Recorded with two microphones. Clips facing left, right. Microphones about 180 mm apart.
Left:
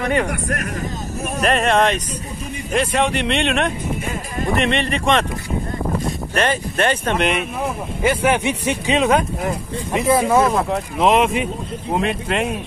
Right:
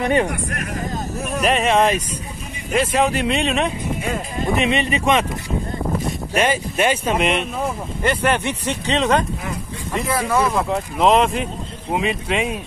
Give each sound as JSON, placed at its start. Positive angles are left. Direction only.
{"t": 0.0, "sound": "speech", "side_deg": -20}
{"t": 1.4, "sound": "speech", "side_deg": 0}
{"t": 10.0, "sound": "speech", "side_deg": 25}
{"t": 10.5, "sound": "speech", "side_deg": 0}